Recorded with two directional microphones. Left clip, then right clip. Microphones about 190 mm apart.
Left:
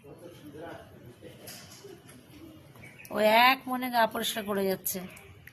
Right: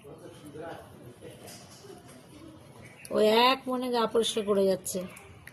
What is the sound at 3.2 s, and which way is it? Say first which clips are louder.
A woman's voice: left 1 dB; 45° left (ahead or behind).